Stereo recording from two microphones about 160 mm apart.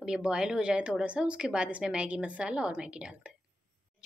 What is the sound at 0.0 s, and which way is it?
A woman's voice, 5° right (ahead or behind).